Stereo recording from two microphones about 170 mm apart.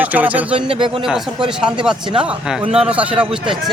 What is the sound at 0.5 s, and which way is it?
Speech, 30° right (ahead or behind).